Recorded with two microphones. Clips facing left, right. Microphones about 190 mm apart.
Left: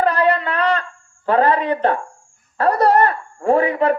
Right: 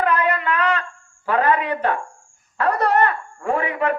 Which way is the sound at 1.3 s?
35° left (ahead or behind).